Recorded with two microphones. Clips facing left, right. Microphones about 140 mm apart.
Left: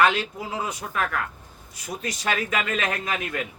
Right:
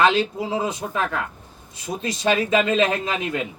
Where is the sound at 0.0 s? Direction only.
25° right (ahead or behind).